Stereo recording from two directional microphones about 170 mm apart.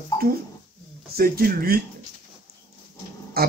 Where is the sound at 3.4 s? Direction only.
65° right (ahead or behind).